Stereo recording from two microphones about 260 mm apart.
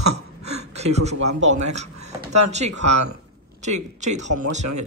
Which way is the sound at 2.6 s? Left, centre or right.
Right.